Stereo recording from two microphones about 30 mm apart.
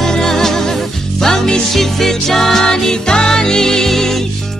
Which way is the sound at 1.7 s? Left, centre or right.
Centre.